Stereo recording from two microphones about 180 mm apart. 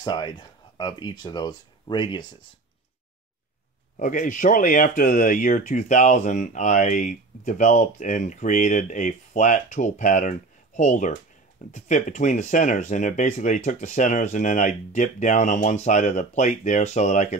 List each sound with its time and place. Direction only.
0.0 s speech: 25° left (ahead or behind)
3.9 s speech: 45° left (ahead or behind)